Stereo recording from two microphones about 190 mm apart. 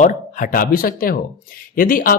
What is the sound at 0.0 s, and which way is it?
Speech, 45° left (ahead or behind).